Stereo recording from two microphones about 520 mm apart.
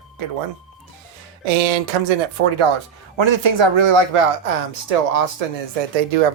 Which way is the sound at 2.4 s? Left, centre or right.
Right.